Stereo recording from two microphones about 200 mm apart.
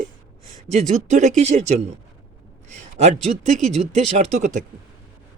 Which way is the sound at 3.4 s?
35° right (ahead or behind).